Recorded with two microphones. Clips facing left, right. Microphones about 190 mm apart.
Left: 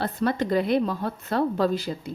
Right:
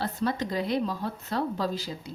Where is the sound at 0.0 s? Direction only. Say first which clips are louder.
Left 4 dB; 60° left (ahead or behind).